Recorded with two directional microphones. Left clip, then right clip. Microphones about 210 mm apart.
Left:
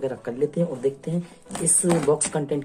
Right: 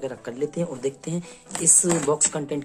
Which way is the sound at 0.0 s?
10° right (ahead or behind).